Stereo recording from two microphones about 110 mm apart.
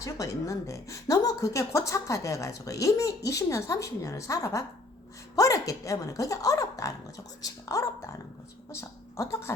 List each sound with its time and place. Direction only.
0.0 s a woman's voice: 30° left (ahead or behind)